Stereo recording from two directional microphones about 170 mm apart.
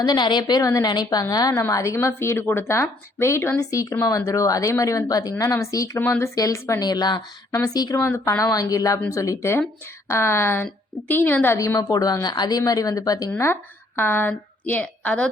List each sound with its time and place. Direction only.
0.0 s a woman's voice: 25° left (ahead or behind); by 15.3 s 5° left (ahead or behind)